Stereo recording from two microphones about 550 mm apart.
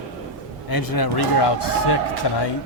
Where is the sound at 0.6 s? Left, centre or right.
Left.